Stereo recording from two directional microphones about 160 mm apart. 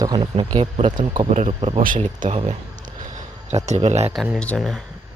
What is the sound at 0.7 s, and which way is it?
Speech, 50° right (ahead or behind).